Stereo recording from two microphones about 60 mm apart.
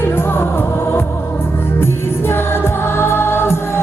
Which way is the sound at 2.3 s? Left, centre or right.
Left.